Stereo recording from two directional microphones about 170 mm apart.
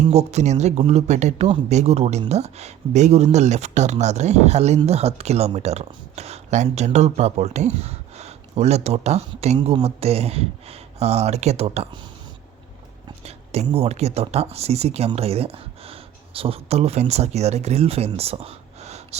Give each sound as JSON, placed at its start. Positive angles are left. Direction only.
{"t": 0.0, "sound": "speech", "side_deg": -40}
{"t": 13.1, "sound": "a sound", "side_deg": -40}
{"t": 13.7, "sound": "speech", "side_deg": -35}